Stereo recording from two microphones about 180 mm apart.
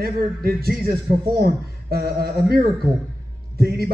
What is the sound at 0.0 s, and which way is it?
Speech, 55° right (ahead or behind).